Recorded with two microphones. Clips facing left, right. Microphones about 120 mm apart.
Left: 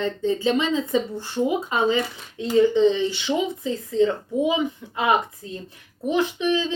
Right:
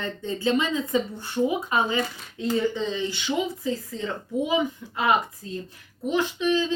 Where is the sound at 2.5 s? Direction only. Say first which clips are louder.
Left 8 dB; 20° left (ahead or behind).